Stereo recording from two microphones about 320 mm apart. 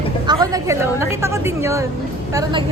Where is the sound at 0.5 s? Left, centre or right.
Centre.